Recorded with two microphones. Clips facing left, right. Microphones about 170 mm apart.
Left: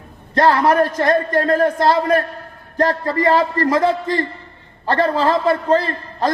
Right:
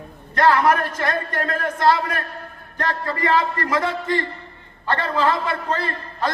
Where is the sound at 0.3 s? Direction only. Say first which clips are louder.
Left 3 dB; 35° left (ahead or behind).